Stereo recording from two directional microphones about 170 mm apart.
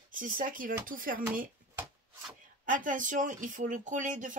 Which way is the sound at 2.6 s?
50° right (ahead or behind).